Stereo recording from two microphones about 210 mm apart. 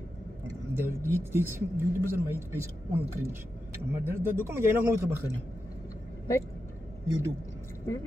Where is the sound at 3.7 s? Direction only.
10° right (ahead or behind).